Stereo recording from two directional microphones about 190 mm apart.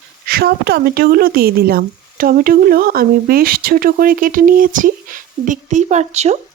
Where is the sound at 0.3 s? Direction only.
55° right (ahead or behind).